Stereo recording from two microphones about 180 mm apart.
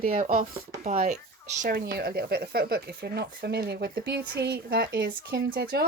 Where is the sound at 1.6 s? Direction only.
55° right (ahead or behind).